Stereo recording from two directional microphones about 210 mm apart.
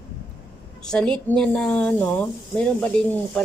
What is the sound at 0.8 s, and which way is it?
Speech, 5° left (ahead or behind).